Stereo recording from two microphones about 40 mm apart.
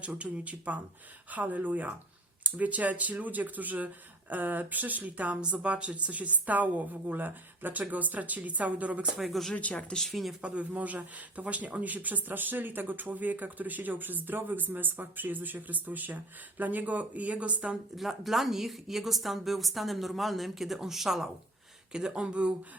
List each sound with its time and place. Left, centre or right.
0.0 s a woman's voice: right
5.4 s a woman's voice: right
9.1 s speech: centre
9.6 s speech: left
10.1 s speech: centre
10.4 s a woman's voice: right
17.9 s speech: centre